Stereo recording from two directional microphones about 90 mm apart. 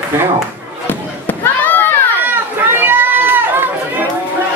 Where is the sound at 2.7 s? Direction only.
25° right (ahead or behind).